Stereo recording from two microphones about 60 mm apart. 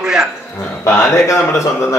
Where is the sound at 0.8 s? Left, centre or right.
Centre.